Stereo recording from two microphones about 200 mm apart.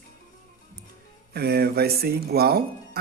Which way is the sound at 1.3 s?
50° right (ahead or behind).